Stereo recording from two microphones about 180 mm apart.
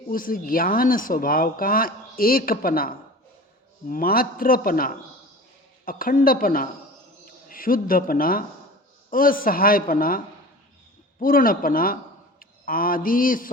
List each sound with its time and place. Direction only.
0.1 s speech: 50° left (ahead or behind)
12.4 s mantra: 55° left (ahead or behind)